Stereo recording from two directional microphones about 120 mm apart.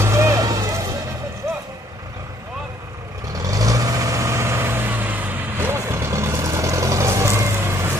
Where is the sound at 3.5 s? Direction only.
30° right (ahead or behind).